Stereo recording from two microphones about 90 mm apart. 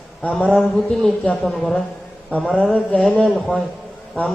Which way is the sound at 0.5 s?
5° left (ahead or behind).